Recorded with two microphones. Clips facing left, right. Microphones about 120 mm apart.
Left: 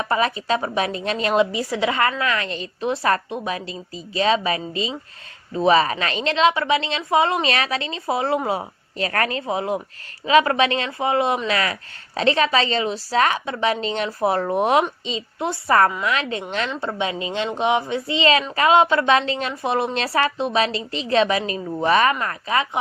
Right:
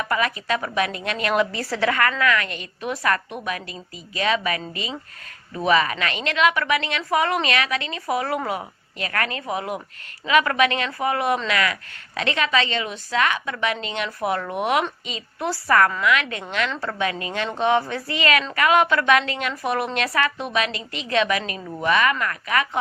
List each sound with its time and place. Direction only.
0.0 s a woman's voice: 30° left (ahead or behind)